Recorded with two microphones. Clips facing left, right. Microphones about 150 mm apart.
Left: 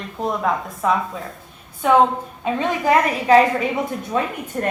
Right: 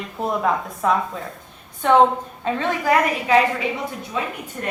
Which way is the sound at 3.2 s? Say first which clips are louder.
Left 4 dB; 40° left (ahead or behind).